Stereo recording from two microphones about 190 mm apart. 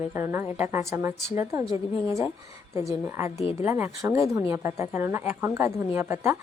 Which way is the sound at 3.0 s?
10° right (ahead or behind).